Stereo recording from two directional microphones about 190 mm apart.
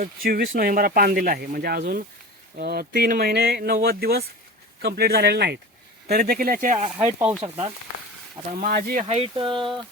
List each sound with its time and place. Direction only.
0.0 s speech: 50° right (ahead or behind)
7.0 s speech: 10° right (ahead or behind)
7.4 s speech: 35° right (ahead or behind)
8.6 s speech: 50° right (ahead or behind)
9.0 s speech: 30° right (ahead or behind)